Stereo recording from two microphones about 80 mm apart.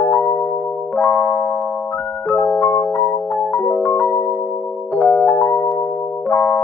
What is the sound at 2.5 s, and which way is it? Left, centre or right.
Music, left.